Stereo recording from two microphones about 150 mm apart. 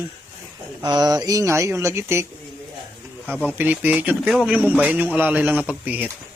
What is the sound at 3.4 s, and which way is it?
Speech, 10° right (ahead or behind).